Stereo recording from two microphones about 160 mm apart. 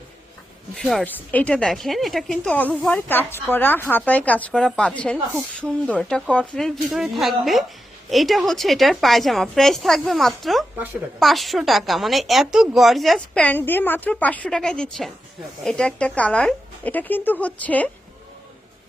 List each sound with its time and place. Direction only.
0.8 s speech: 5° left (ahead or behind)